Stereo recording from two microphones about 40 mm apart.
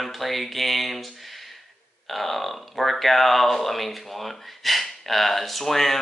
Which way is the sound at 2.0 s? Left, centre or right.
Centre.